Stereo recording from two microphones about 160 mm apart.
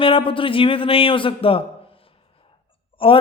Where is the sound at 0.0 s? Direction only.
35° left (ahead or behind).